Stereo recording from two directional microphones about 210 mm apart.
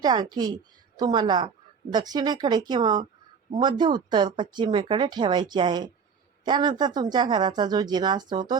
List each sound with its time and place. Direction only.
0.0 s speech: 20° right (ahead or behind)